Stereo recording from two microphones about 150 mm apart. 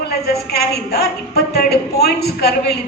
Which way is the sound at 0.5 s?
90° left.